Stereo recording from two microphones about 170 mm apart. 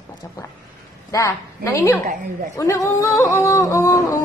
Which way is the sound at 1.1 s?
20° left (ahead or behind).